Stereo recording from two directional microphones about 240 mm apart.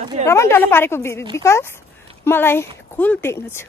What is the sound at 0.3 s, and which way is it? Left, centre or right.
Speech, centre.